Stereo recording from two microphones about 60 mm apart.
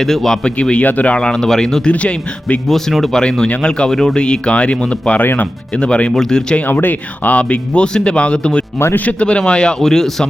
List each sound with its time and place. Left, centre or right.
0.0 s speech: centre
0.4 s speech: centre
1.9 s speech: left
2.6 s speech: centre
5.2 s speech: left
5.7 s speech: centre
6.6 s speech: left; by 10.2 s centre